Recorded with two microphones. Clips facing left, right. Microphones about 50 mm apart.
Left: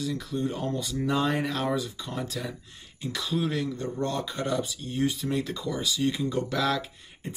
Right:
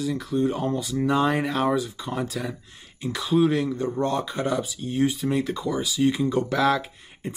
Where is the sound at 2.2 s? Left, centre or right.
Centre.